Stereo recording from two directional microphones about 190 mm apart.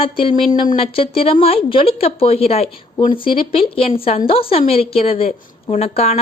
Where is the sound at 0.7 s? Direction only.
30° left (ahead or behind).